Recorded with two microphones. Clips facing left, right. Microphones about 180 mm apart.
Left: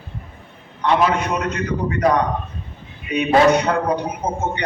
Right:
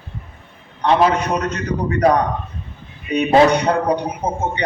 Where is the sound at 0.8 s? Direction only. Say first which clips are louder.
Right 2 dB; 40° right (ahead or behind).